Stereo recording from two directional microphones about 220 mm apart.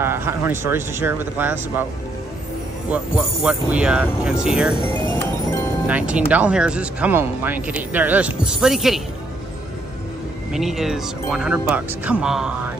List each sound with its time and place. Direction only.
0.0 s speech: 10° right (ahead or behind)
2.9 s speech: 5° right (ahead or behind)
5.9 s speech: 5° right (ahead or behind)
10.5 s speech: centre (ahead or behind)